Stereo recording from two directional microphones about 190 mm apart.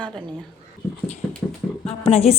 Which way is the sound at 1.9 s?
30° left (ahead or behind).